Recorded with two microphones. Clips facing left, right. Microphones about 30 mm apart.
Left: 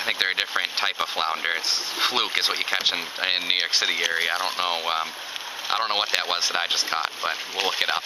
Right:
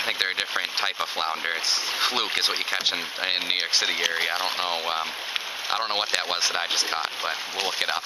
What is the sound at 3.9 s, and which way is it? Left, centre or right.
Speech, centre.